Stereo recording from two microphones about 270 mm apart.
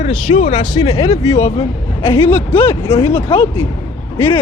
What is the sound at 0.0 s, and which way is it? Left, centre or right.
A woman's voice, left.